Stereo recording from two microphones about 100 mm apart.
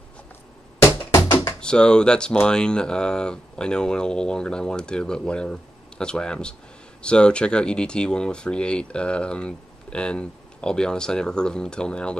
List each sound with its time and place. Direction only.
1.1 s music: 35° left (ahead or behind)
1.6 s speech: 10° left (ahead or behind)